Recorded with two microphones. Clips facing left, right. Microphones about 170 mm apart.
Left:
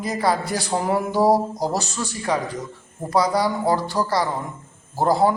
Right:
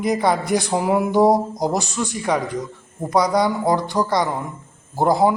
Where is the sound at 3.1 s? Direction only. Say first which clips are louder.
Right 2 dB; 20° right (ahead or behind).